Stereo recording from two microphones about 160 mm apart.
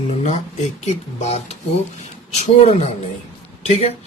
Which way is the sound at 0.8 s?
40° left (ahead or behind).